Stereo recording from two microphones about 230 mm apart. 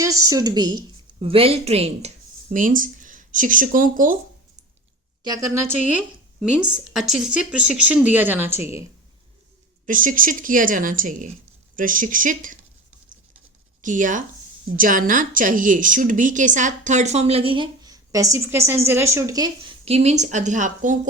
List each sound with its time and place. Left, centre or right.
0.0 s a woman's voice: centre; by 4.2 s right
5.2 s speech: centre
9.8 s a woman's voice: right
13.8 s a woman's voice: right